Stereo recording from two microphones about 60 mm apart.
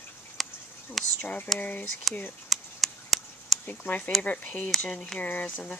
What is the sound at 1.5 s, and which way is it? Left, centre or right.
Speech, left.